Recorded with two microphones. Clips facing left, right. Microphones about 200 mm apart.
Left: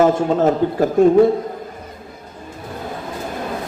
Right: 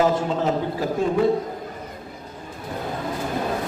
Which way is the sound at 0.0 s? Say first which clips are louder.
Left 6 dB; 50° left (ahead or behind).